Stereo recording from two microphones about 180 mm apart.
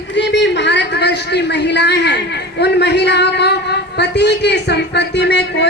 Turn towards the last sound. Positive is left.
turn(degrees=70)  # may be behind; listen again after turning